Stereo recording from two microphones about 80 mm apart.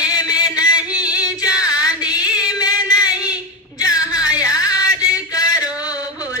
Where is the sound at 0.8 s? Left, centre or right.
Centre.